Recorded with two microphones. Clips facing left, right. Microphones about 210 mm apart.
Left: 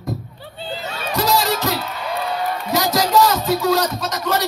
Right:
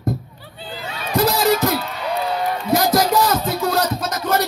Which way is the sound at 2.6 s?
55° right (ahead or behind).